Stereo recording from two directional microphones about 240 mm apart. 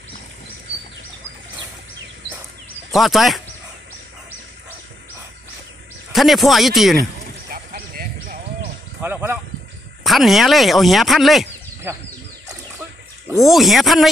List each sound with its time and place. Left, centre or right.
2.9 s speech: centre
6.1 s speech: centre
7.5 s horse: right
9.0 s speech: centre
13.4 s speech: centre